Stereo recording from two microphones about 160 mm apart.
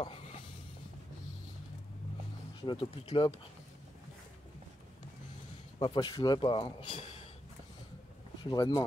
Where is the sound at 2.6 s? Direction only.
35° left (ahead or behind).